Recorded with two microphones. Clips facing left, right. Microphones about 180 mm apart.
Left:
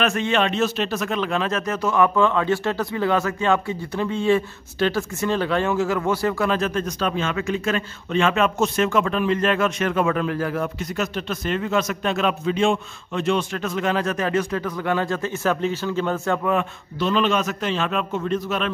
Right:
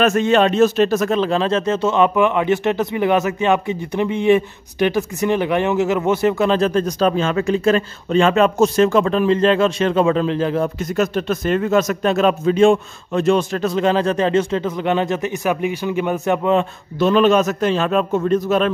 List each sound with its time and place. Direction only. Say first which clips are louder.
0.0 s speech: right 6 dB; 45° right (ahead or behind); by 10.7 s 25° right (ahead or behind)
11.0 s a man's voice: right 8 dB; 45° right (ahead or behind); by 16.6 s 20° right (ahead or behind)
17.0 s a man's voice: right 7 dB; 45° right (ahead or behind)